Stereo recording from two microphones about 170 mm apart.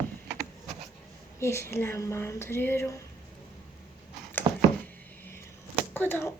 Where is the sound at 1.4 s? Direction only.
15° left (ahead or behind).